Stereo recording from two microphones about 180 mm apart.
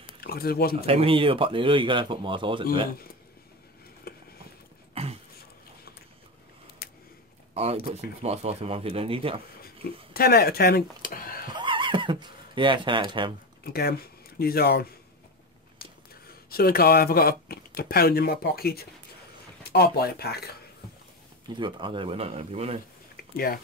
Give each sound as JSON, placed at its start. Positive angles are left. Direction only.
{"t": 0.2, "sound": "speech", "side_deg": 60}
{"t": 0.8, "sound": "speech", "side_deg": -30}
{"t": 4.1, "sound": "a sound", "side_deg": 60}
{"t": 5.0, "sound": "a sound", "side_deg": -35}
{"t": 6.8, "sound": "a sound", "side_deg": 60}
{"t": 7.5, "sound": "speech", "side_deg": -35}
{"t": 10.1, "sound": "speech", "side_deg": 60}
{"t": 11.4, "sound": "neigh", "side_deg": -25}
{"t": 13.7, "sound": "speech", "side_deg": 60}
{"t": 16.4, "sound": "speech", "side_deg": 55}
{"t": 21.5, "sound": "speech", "side_deg": -25}
{"t": 23.3, "sound": "speech", "side_deg": 55}